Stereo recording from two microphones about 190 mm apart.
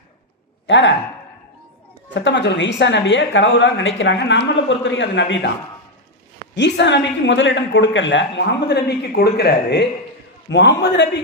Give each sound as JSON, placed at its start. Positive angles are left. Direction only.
{"t": 0.7, "sound": "a woman's voice", "side_deg": 70}
{"t": 2.1, "sound": "a woman's voice", "side_deg": 70}
{"t": 6.6, "sound": "a woman's voice", "side_deg": 65}
{"t": 8.6, "sound": "a man's voice", "side_deg": 60}